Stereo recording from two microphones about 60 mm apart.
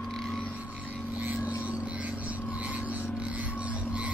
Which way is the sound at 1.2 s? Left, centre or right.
Right.